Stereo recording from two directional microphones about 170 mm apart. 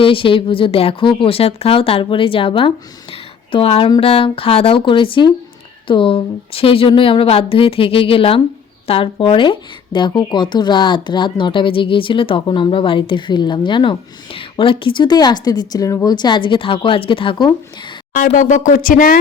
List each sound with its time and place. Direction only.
0.0 s speech: 30° left (ahead or behind)
18.1 s speech: 50° left (ahead or behind)